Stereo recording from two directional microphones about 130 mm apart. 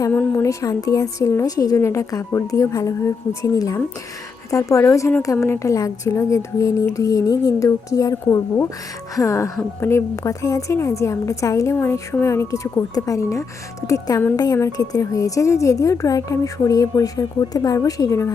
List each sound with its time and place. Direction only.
0.1 s a woman's voice: 10° left (ahead or behind)
0.4 s a woman's voice: 25° left (ahead or behind)